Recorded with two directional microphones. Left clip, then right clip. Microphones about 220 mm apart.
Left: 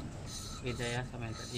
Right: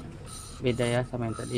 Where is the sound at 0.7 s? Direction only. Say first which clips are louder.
Right 11 dB; 35° right (ahead or behind).